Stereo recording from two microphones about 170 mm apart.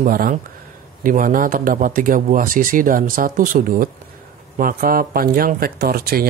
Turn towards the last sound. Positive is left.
turn(degrees=-65)  # may be behind; listen again after turning